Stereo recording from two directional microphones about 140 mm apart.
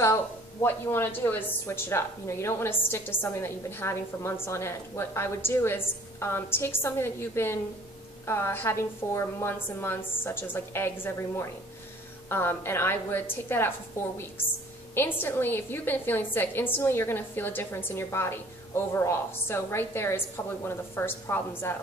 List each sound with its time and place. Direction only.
0.0 s a woman's voice: 20° left (ahead or behind)